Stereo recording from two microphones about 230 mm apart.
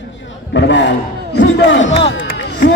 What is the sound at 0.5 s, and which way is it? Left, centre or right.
A man's voice, left.